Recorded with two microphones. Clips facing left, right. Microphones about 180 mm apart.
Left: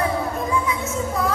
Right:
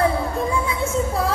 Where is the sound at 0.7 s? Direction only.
30° right (ahead or behind).